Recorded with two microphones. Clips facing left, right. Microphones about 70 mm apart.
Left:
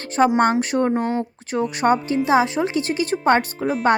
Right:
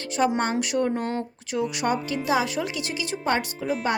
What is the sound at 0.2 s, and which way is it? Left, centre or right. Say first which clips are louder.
Speech: left 7 dB; left.